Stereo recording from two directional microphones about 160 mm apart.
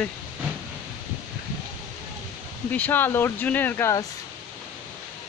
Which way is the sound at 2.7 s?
10° left (ahead or behind).